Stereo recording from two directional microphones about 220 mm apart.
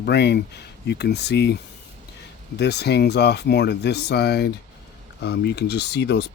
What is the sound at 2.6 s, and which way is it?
Speech, 50° left (ahead or behind).